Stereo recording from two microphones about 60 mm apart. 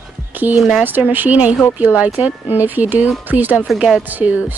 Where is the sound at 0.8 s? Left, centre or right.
Right.